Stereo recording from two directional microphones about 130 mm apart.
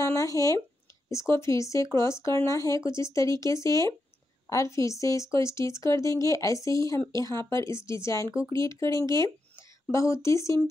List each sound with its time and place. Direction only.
0.0 s a sound: 25° left (ahead or behind)
1.0 s speech: 20° left (ahead or behind)
8.9 s speech: 35° right (ahead or behind)
9.6 s speech: 20° left (ahead or behind)